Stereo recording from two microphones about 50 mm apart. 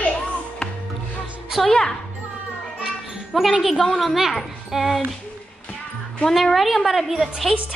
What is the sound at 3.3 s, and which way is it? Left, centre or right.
A woman's voice, centre.